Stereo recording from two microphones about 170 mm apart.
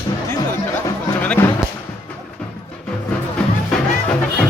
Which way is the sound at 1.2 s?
10° left (ahead or behind).